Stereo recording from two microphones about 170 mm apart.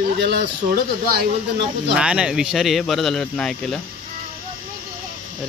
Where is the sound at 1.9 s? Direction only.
5° right (ahead or behind).